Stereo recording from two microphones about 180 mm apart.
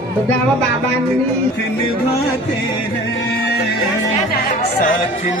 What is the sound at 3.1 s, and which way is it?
Music, 75° left (ahead or behind).